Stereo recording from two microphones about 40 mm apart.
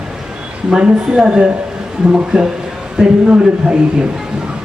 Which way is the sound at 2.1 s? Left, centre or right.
Right.